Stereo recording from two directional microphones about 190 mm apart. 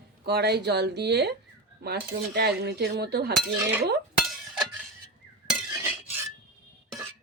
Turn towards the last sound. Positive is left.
turn(degrees=-15)  # may be behind; listen again after turning